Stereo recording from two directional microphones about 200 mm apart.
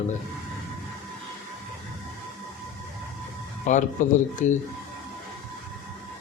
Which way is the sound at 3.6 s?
40° left (ahead or behind).